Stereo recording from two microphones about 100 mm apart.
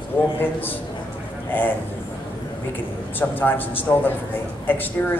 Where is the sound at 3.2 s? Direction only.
20° left (ahead or behind).